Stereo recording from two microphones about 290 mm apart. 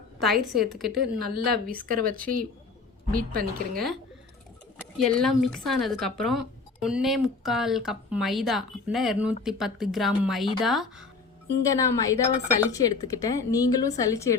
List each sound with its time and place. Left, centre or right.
0.2 s speech: centre
1.2 s a woman's voice: right
4.8 s speech: centre
11.6 s a woman's voice: centre